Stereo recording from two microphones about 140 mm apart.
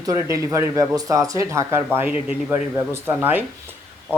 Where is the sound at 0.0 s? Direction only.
25° right (ahead or behind).